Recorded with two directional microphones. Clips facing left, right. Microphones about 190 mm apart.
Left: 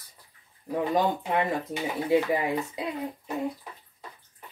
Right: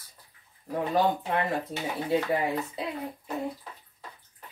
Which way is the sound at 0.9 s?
15° left (ahead or behind).